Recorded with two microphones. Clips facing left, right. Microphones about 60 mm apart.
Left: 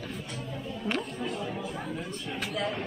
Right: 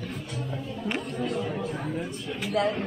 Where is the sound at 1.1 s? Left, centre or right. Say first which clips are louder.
Right 4 dB; right.